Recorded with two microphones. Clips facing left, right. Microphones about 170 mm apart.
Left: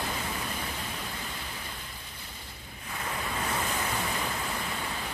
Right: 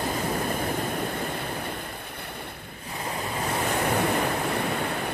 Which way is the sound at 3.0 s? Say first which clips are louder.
Right 4 dB; 35° right (ahead or behind).